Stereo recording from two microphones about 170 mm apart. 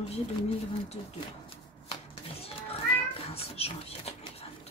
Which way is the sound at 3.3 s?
35° left (ahead or behind).